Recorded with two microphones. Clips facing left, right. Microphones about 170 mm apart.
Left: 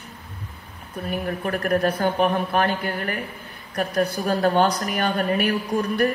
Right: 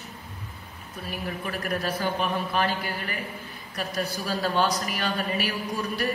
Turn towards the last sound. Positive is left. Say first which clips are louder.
# left 7 dB
turn(degrees=60)  # may be behind; listen again after turning